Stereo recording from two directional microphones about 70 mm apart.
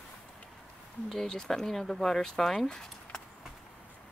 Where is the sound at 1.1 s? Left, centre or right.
Centre.